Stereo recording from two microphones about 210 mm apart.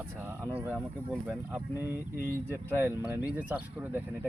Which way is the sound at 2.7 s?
10° right (ahead or behind).